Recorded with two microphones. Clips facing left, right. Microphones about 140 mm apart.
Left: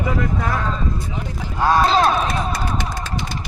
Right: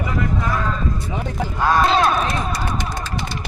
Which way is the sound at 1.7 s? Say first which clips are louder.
Left 1 dB; 30° left (ahead or behind).